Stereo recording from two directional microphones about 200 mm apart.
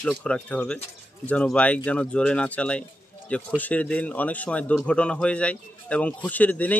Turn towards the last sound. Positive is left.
turn(degrees=10)  # may be behind; listen again after turning